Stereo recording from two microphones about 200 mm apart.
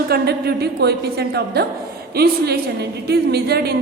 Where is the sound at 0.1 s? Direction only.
50° right (ahead or behind).